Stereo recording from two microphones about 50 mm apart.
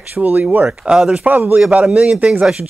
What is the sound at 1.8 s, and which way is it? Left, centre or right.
Speech, centre.